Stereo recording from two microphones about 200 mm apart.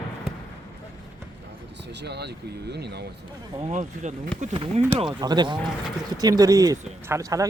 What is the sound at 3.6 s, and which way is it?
Speech, 35° right (ahead or behind).